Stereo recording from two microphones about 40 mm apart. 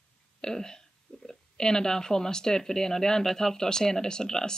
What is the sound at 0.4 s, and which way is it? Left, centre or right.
Speech, centre.